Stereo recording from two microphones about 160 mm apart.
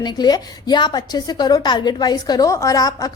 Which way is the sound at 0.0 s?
25° left (ahead or behind).